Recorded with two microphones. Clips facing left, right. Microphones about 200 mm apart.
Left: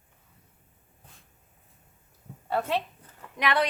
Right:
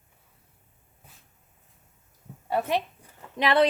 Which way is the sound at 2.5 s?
15° right (ahead or behind).